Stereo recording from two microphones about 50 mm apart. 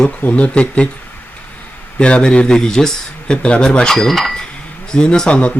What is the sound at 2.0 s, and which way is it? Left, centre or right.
Speech, left.